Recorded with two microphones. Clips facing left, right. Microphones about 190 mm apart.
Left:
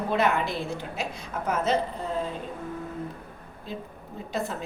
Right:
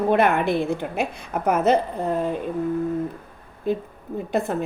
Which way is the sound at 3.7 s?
60° right (ahead or behind).